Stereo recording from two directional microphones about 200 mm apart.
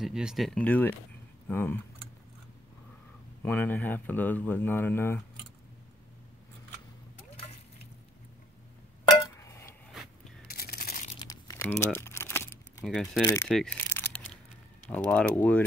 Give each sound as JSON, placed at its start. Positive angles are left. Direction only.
{"t": 0.0, "sound": "speech", "side_deg": 0}
{"t": 3.4, "sound": "speech", "side_deg": 10}
{"t": 9.4, "sound": "a sound", "side_deg": 15}
{"t": 10.5, "sound": "a sound", "side_deg": 50}
{"t": 11.1, "sound": "crumpling", "side_deg": 15}
{"t": 12.8, "sound": "speech", "side_deg": 0}
{"t": 13.2, "sound": "speech", "side_deg": 15}
{"t": 13.9, "sound": "a sound", "side_deg": 5}
{"t": 14.9, "sound": "speech", "side_deg": 5}